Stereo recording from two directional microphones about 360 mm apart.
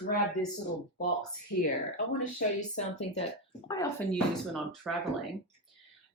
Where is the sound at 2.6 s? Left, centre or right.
Centre.